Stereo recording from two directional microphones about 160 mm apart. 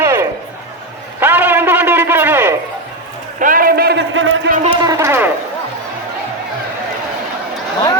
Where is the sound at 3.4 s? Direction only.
60° right (ahead or behind); by 4.0 s 75° right (ahead or behind).